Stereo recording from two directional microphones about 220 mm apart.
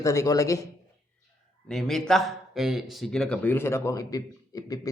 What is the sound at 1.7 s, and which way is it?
Speech, centre (ahead or behind).